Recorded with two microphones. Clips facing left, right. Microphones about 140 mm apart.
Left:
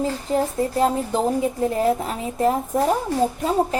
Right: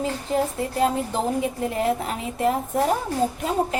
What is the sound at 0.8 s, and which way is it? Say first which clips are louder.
A woman's voice: left 1 dB; 35° left (ahead or behind).